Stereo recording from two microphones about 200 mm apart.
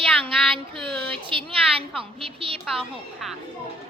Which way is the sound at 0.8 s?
5° left (ahead or behind).